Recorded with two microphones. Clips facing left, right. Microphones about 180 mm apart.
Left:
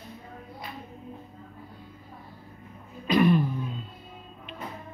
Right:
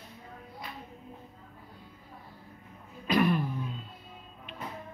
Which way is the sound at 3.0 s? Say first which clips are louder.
Left 5 dB; 5° right (ahead or behind).